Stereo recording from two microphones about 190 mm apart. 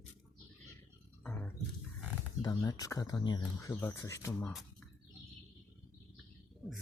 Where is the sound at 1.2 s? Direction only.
5° left (ahead or behind).